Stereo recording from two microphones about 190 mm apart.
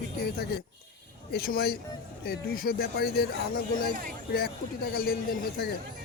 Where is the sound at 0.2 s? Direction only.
55° left (ahead or behind).